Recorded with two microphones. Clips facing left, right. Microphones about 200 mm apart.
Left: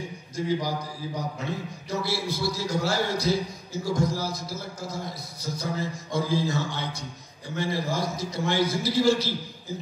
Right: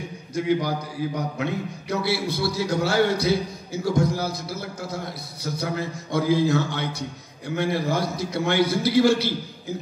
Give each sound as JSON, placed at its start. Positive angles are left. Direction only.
{"t": 0.4, "sound": "a man's voice", "side_deg": -65}